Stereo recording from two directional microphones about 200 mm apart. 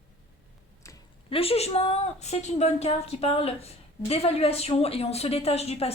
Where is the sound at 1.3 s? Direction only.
30° left (ahead or behind).